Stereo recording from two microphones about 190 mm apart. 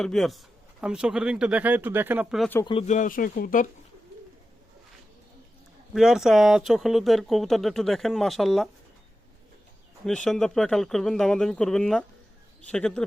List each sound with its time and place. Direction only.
0.0 s speech: centre (ahead or behind)
2.4 s speech: 10° left (ahead or behind)
2.6 s speech: 35° left (ahead or behind)
5.9 s speech: centre (ahead or behind)
10.1 s speech: centre (ahead or behind)